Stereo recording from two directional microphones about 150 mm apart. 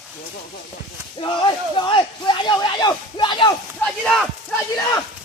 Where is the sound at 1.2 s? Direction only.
30° left (ahead or behind).